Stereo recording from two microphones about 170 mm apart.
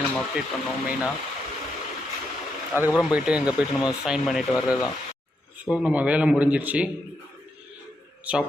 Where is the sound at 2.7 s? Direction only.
15° right (ahead or behind).